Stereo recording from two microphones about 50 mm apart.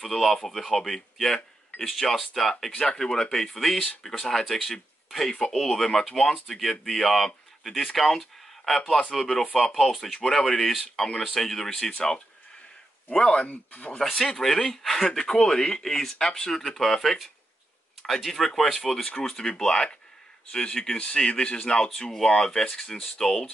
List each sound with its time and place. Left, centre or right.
0.0 s speech: centre
10.1 s speech: centre
13.1 s speech: centre
13.5 s speech: left
14.4 s speech: centre